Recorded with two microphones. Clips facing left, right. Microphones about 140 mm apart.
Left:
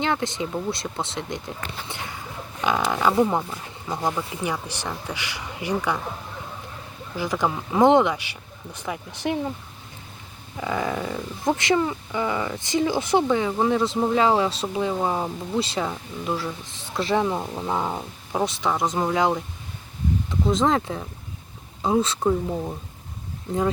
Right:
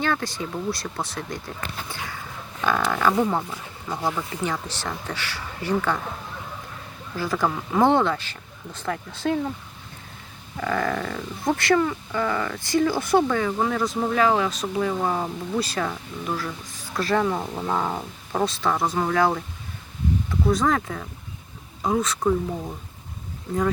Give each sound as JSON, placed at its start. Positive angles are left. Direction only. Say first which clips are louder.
{"t": 0.0, "sound": "speech", "louder": "left 1 dB", "side_deg": 20}
{"t": 7.2, "sound": "speech", "louder": "even", "side_deg": 15}
{"t": 10.6, "sound": "speech", "louder": "right 1 dB", "side_deg": 15}
{"t": 17.4, "sound": "speech", "louder": "right 1 dB", "side_deg": 0}
{"t": 17.7, "sound": "speech", "louder": "right 1 dB", "side_deg": 15}
{"t": 20.5, "sound": "speech", "louder": "left 1 dB", "side_deg": 25}